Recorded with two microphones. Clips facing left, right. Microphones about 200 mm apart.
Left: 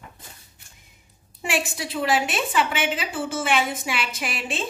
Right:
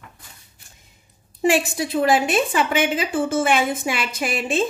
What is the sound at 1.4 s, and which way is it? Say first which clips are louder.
A woman's voice: right 8 dB; 40° right (ahead or behind).